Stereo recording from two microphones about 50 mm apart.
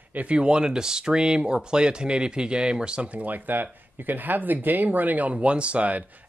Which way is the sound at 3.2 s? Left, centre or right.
Right.